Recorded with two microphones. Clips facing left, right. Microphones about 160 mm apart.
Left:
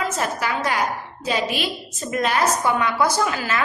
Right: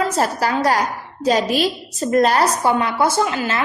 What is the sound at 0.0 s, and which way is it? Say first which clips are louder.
A woman's voice: right 5 dB; 35° right (ahead or behind).